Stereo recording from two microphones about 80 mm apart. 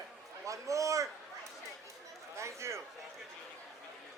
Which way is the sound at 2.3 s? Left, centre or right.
Right.